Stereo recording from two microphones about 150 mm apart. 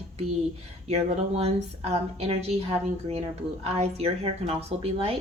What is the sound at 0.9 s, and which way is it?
A woman's voice, 45° right (ahead or behind).